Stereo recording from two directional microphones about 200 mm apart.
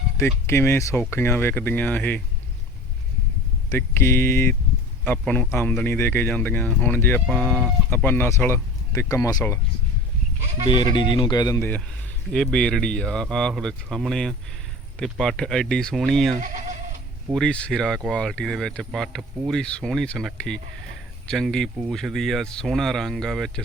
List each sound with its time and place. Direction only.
0.4 s speech: 10° left (ahead or behind)
3.7 s speech: 10° left (ahead or behind)
10.9 s speech: 25° left (ahead or behind)
12.3 s speech: 5° left (ahead or behind)
17.3 s speech: 5° left (ahead or behind)